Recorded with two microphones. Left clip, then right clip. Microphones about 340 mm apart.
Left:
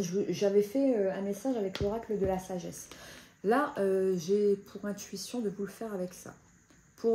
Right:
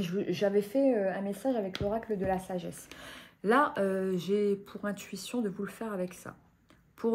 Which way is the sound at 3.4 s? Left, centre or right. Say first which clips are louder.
Right 2 dB; right.